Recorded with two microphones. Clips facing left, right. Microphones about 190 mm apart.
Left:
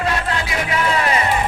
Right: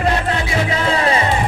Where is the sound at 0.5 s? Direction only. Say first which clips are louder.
Right 1 dB; 30° right (ahead or behind).